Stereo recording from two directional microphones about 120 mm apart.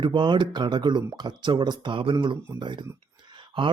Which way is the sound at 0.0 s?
40° right (ahead or behind).